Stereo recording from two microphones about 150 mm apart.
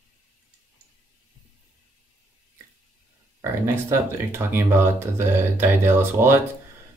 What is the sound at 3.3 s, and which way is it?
Speech, 15° right (ahead or behind).